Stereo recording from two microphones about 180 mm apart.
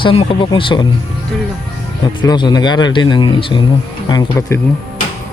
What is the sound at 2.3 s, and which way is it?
Speech, 25° left (ahead or behind).